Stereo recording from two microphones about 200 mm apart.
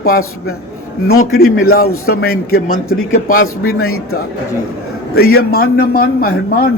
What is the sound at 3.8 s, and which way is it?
Speech, 90° left.